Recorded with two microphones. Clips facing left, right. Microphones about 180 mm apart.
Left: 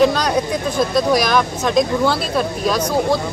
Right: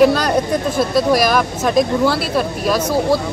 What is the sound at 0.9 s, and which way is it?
Speech, 5° right (ahead or behind).